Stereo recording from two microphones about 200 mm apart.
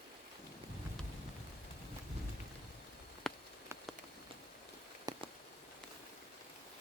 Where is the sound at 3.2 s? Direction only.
5° left (ahead or behind).